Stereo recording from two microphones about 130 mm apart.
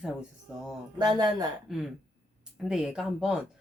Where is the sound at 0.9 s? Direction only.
30° right (ahead or behind).